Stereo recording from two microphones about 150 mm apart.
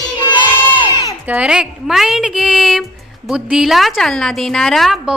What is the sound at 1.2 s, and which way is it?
A woman's voice, 10° right (ahead or behind).